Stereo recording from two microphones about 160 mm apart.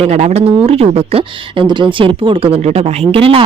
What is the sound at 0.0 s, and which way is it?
Speech, 40° right (ahead or behind).